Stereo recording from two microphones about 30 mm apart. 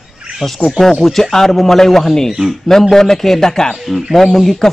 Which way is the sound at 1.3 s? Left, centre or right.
Centre.